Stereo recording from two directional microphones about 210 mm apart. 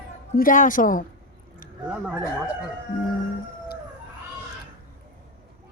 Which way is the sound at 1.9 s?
5° right (ahead or behind).